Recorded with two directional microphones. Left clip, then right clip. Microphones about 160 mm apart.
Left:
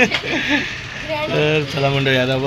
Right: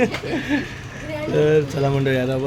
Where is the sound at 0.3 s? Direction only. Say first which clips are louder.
Left 5 dB; 20° right (ahead or behind).